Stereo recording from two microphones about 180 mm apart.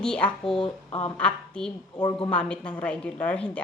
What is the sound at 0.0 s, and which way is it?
Speech, 5° left (ahead or behind).